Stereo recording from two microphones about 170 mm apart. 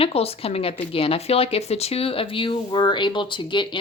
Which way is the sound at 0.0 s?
35° left (ahead or behind).